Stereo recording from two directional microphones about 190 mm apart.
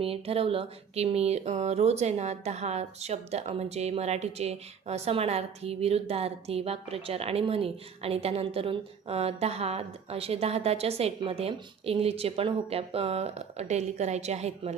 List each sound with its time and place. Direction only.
0.0 s speech: 30° right (ahead or behind)